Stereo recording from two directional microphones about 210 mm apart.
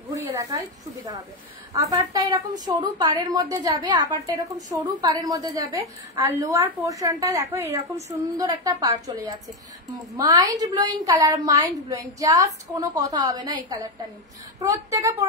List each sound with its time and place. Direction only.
0.1 s a woman's voice: 15° right (ahead or behind)